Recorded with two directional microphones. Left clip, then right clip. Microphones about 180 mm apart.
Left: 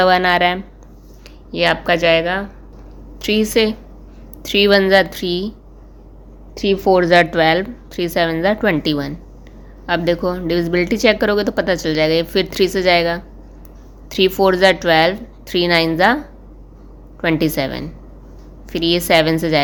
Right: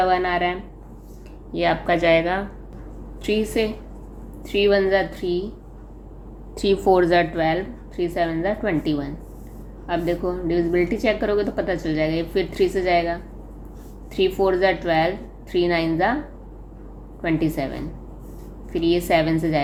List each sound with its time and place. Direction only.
0.0 s speech: 55° left (ahead or behind)
1.5 s a woman's voice: 30° left (ahead or behind)
3.2 s a woman's voice: 40° left (ahead or behind)
4.4 s a woman's voice: 55° left (ahead or behind)
6.5 s a woman's voice: 25° left (ahead or behind); by 16.1 s 50° left (ahead or behind)
17.2 s a woman's voice: 50° left (ahead or behind)